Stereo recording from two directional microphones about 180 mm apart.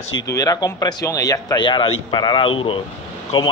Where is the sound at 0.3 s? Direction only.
20° left (ahead or behind).